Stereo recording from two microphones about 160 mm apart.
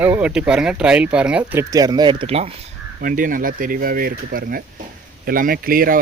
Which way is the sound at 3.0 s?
60° right (ahead or behind).